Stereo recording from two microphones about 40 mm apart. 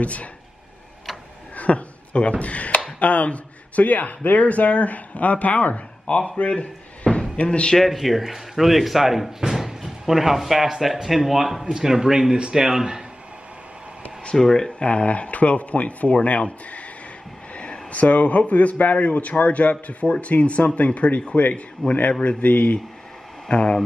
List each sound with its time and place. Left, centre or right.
0.0 s a man's voice: left
1.6 s a man's voice: left
7.7 s a man's voice: centre
9.5 s drawer open or close: centre
10.0 s a man's voice: centre
14.3 s speech: centre
14.9 s a man's voice: left
17.6 s a man's voice: left
21.4 s a man's voice: left
23.5 s speech: left